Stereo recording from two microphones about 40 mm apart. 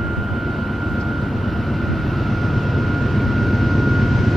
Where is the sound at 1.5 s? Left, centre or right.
Centre.